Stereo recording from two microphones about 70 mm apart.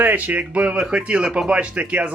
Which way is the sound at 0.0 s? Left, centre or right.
Right.